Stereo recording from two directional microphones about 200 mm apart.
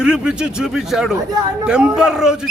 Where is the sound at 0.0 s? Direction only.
5° right (ahead or behind).